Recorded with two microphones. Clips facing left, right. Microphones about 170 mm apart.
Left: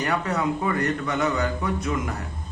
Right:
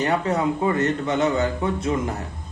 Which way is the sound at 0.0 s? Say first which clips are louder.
Right 3 dB; 25° right (ahead or behind).